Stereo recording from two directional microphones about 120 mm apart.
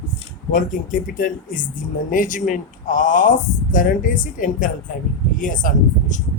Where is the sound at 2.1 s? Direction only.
90° left.